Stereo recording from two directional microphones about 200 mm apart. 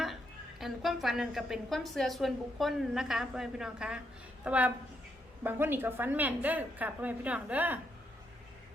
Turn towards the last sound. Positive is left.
turn(degrees=-10)  # may be behind; listen again after turning